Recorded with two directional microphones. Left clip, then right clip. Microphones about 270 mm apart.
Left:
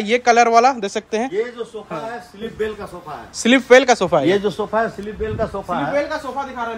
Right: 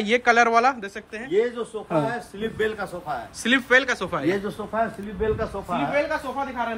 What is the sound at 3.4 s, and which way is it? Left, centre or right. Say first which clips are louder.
Speech: left 8 dB; centre.